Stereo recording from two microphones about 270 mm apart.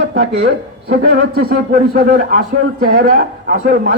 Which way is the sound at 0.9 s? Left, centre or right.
Right.